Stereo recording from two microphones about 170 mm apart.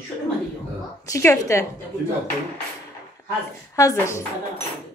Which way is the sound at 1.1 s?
15° left (ahead or behind).